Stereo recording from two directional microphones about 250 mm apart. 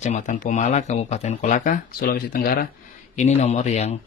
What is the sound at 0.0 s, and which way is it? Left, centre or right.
Speech, left.